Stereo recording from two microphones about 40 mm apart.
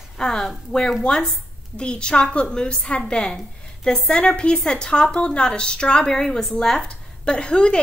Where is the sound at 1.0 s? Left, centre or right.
Centre; by 3.2 s left.